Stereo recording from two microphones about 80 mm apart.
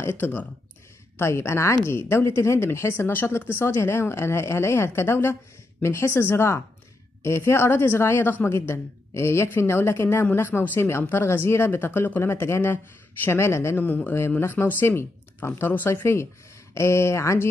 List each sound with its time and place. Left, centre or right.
0.0 s speech: left
1.1 s a woman's voice: left